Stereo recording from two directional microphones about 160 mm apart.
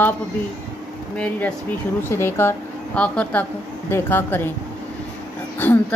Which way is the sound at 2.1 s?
15° left (ahead or behind).